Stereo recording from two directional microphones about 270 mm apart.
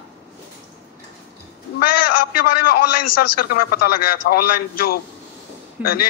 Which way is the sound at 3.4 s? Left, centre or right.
Left.